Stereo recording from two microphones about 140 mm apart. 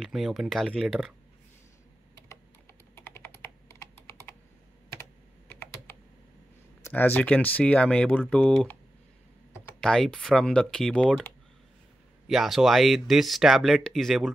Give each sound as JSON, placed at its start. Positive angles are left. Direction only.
{"t": 0.0, "sound": "speech", "side_deg": 0}
{"t": 3.0, "sound": "computer keyboard", "side_deg": 15}
{"t": 5.5, "sound": "typing", "side_deg": 15}
{"t": 6.8, "sound": "speech", "side_deg": 15}
{"t": 9.8, "sound": "speech", "side_deg": 5}
{"t": 12.3, "sound": "speech", "side_deg": 0}